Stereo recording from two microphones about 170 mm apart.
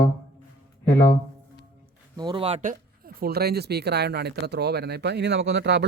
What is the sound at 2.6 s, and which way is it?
Speech, 55° right (ahead or behind).